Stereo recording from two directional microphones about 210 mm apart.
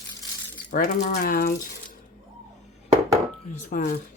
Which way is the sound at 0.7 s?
35° left (ahead or behind).